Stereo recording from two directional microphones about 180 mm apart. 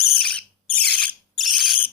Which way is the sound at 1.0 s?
5° left (ahead or behind).